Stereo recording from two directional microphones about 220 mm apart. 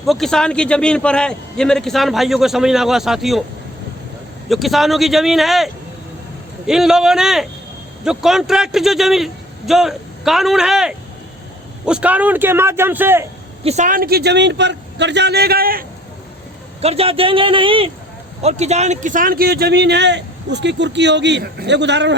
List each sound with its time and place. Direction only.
0.0 s a man's voice: centre (ahead or behind)
4.4 s a man's voice: centre (ahead or behind)
13.7 s speech: 35° right (ahead or behind)
16.8 s a man's voice: 25° right (ahead or behind); by 22.1 s 50° right (ahead or behind)